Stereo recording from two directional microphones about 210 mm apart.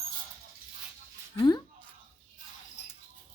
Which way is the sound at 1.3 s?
20° left (ahead or behind).